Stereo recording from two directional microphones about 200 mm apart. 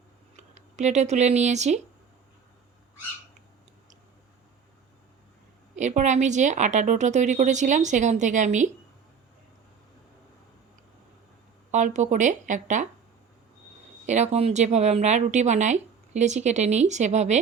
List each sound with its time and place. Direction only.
0.3 s speech: 35° right (ahead or behind)
5.7 s speech: 35° right (ahead or behind)
11.7 s speech: 35° right (ahead or behind)
14.1 s speech: 35° right (ahead or behind)